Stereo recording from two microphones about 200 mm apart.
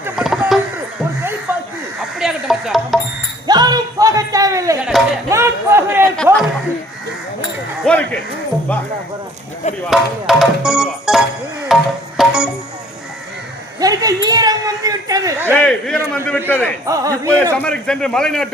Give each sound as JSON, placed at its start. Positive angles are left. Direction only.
{"t": 0.2, "sound": "a sound", "side_deg": 0}
{"t": 2.1, "sound": "a sound", "side_deg": -5}
{"t": 3.4, "sound": "music", "side_deg": -20}
{"t": 5.3, "sound": "a sound", "side_deg": -15}
{"t": 6.3, "sound": "chuckle", "side_deg": -10}
{"t": 7.9, "sound": "speech", "side_deg": 5}
{"t": 9.8, "sound": "music", "side_deg": 0}
{"t": 13.7, "sound": "a sound", "side_deg": -20}
{"t": 15.5, "sound": "music", "side_deg": 5}
{"t": 16.2, "sound": "a man's voice", "side_deg": 10}
{"t": 16.8, "sound": "speech", "side_deg": -15}
{"t": 17.6, "sound": "music", "side_deg": 5}